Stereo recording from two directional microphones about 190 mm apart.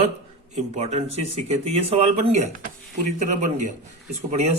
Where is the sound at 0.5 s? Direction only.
35° right (ahead or behind).